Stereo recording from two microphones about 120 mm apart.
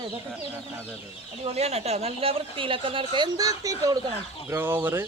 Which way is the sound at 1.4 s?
60° right (ahead or behind).